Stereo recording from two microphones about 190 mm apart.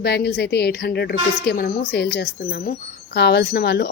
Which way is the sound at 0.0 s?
55° left (ahead or behind).